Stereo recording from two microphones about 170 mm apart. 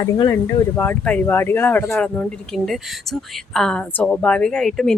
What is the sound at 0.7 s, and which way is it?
A woman's voice, 10° left (ahead or behind).